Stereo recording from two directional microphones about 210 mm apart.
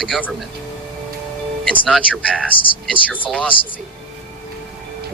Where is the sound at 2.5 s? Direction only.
25° left (ahead or behind).